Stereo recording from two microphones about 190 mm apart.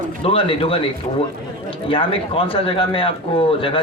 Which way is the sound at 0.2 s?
30° left (ahead or behind).